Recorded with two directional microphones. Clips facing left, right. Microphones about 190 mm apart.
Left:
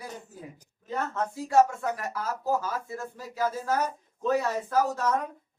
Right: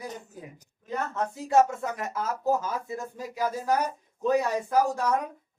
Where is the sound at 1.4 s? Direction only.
20° right (ahead or behind).